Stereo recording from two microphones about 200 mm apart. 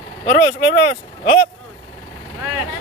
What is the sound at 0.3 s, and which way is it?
Speech, 40° left (ahead or behind).